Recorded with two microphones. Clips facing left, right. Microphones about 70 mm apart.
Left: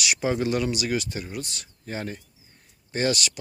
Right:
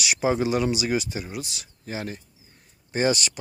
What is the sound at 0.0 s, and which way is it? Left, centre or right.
Speech, centre.